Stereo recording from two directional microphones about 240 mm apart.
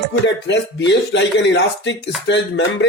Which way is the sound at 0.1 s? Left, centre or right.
Left.